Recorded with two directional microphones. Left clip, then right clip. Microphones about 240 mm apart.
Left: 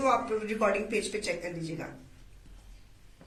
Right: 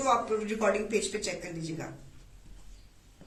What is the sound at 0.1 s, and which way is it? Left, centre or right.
A man's voice, centre.